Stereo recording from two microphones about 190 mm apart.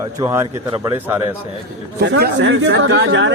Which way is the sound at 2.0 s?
60° right (ahead or behind).